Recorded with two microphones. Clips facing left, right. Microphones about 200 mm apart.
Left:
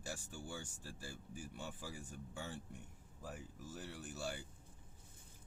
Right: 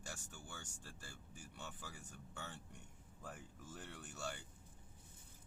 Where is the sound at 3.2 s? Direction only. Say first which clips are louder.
Left 4 dB; 5° left (ahead or behind).